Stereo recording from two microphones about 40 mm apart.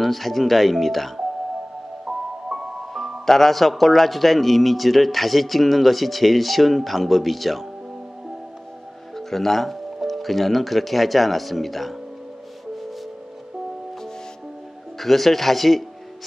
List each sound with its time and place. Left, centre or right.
0.0 s speech: centre
2.0 s music: centre
3.3 s speech: centre
9.1 s speech: centre
15.0 s speech: centre